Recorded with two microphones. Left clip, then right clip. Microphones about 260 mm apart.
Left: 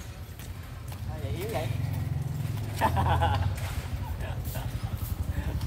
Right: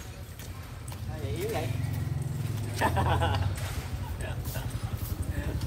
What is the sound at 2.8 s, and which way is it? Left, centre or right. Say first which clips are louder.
Speech: left 1 dB; left.